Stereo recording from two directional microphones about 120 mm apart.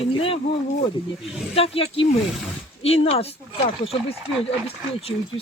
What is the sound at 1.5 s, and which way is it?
Speech, 50° left (ahead or behind).